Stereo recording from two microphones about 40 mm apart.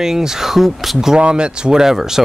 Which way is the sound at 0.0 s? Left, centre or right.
Centre.